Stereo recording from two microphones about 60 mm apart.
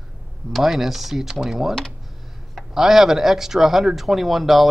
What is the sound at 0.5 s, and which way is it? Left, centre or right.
Speech, centre.